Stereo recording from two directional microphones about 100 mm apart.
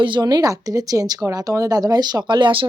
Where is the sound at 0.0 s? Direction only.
50° right (ahead or behind).